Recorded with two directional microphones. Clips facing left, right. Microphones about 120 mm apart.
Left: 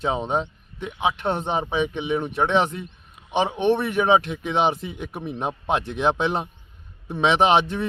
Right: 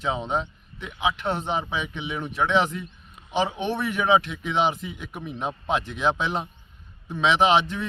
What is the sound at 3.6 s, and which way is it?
Speech, 55° left (ahead or behind).